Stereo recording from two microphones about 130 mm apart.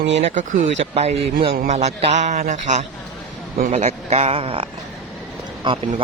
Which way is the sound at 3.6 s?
55° right (ahead or behind).